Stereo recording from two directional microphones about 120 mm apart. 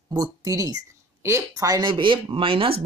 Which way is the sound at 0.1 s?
30° right (ahead or behind).